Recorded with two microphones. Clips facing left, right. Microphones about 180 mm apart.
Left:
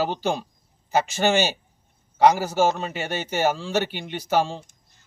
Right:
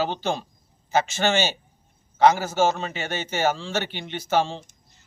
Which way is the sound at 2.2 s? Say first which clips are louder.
Left 1 dB; 10° left (ahead or behind).